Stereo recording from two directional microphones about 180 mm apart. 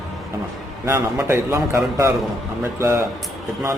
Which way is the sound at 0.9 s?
15° right (ahead or behind).